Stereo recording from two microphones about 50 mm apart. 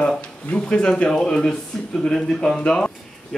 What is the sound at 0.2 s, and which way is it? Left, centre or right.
Speech, left.